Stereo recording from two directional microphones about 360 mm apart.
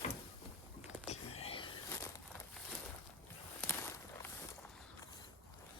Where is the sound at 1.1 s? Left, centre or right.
Centre.